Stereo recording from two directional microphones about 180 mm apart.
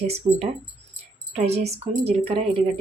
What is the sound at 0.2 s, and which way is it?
Speech, 30° right (ahead or behind).